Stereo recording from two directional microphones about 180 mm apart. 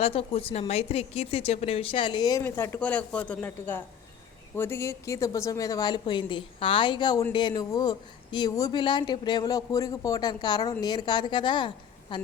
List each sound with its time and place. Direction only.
0.0 s speech: 35° left (ahead or behind)